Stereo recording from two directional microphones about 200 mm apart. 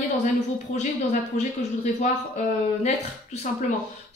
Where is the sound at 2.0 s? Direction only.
35° left (ahead or behind).